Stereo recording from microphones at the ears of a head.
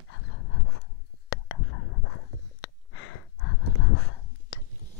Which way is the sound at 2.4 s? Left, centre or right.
Left.